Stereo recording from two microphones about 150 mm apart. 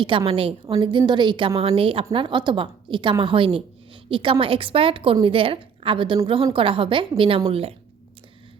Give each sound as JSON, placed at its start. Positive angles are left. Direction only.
{"t": 0.3, "sound": "a woman's voice", "side_deg": -40}